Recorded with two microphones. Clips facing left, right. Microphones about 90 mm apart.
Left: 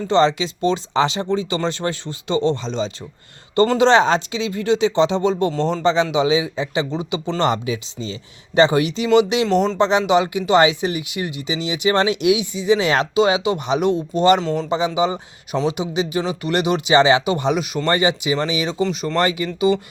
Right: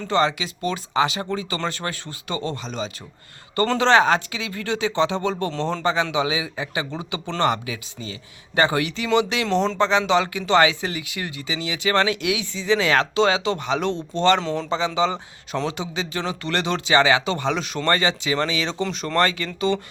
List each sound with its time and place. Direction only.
0.1 s speech: 30° left (ahead or behind); by 5.8 s 10° left (ahead or behind)
5.8 s speech: 25° left (ahead or behind)
14.4 s speech: 5° left (ahead or behind)
14.7 s speech: 15° left (ahead or behind)